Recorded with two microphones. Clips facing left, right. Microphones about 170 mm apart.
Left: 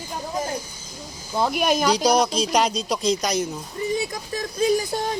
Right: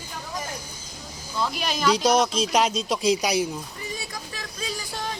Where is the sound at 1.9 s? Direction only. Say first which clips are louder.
Left 1 dB; centre (ahead or behind).